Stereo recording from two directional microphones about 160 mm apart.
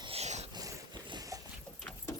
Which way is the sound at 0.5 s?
25° right (ahead or behind).